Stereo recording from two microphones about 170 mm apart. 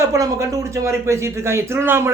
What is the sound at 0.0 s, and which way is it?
A man's voice, 15° right (ahead or behind).